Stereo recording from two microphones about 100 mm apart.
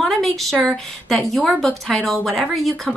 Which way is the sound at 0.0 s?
Centre (ahead or behind).